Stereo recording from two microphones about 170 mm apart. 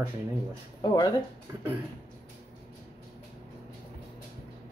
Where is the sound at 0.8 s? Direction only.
25° left (ahead or behind).